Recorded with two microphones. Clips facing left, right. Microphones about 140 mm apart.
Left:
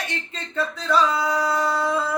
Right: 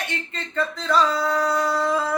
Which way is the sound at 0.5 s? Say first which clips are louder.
Even; 10° left (ahead or behind).